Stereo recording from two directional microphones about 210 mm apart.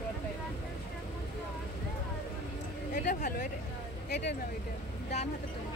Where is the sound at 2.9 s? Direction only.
40° left (ahead or behind).